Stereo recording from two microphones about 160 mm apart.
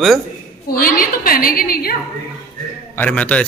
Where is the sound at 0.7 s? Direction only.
65° left (ahead or behind).